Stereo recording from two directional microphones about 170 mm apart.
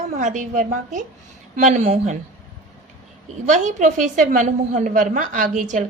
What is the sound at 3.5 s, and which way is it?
A woman's voice, 45° right (ahead or behind).